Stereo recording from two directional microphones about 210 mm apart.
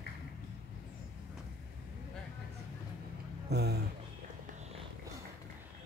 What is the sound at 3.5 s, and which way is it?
Speech, 50° right (ahead or behind).